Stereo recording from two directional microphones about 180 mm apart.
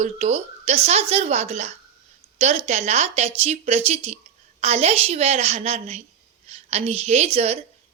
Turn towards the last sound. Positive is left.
turn(degrees=-35)  # may be behind; listen again after turning